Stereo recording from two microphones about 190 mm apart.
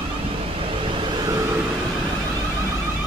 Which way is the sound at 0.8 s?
25° right (ahead or behind).